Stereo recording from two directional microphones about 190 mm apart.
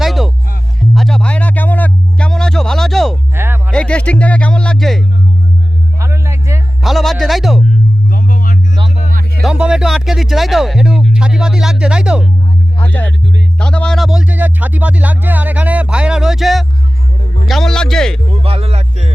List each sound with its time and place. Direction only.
0.0 s music: centre (ahead or behind)
3.3 s music: 10° right (ahead or behind)
3.7 s speech: 5° left (ahead or behind)
6.0 s music: 15° right (ahead or behind)
6.8 s speech: centre (ahead or behind)
8.1 s music: 45° left (ahead or behind)
9.0 s music: 40° right (ahead or behind)
9.4 s speech: 5° right (ahead or behind)
12.8 s speech: 10° left (ahead or behind)
18.4 s speech: 30° right (ahead or behind)